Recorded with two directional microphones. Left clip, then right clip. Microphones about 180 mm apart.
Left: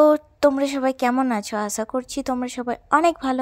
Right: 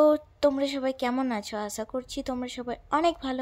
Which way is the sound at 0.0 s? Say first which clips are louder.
Left 6 dB; 30° left (ahead or behind).